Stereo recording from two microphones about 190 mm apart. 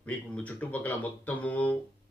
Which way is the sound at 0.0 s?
10° left (ahead or behind).